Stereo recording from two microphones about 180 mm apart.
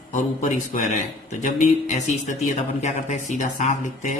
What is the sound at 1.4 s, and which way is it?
Speech, 45° left (ahead or behind).